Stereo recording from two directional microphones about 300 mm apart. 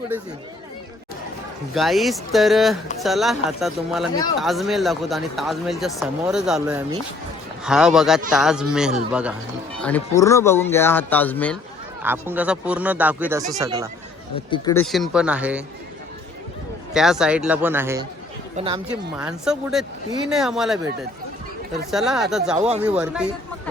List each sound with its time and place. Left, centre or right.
1.7 s speech: centre
12.0 s speech: centre
14.5 s speech: centre
16.9 s speech: centre
18.9 s speech: centre
21.8 s speech: centre